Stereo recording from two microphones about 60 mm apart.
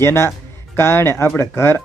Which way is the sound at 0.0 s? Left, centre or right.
Left.